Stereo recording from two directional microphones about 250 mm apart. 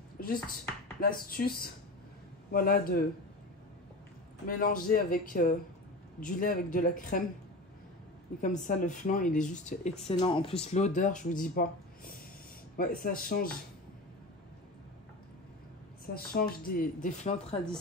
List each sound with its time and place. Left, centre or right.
0.2 s a sound: left
1.0 s speech: left
4.5 s speech: left
8.4 s speech: left
16.3 s speech: left